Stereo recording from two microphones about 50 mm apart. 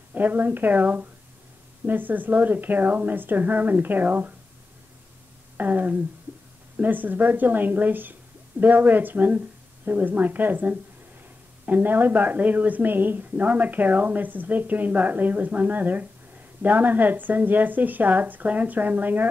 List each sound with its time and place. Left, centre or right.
0.1 s a woman's voice: right
5.6 s a woman's voice: right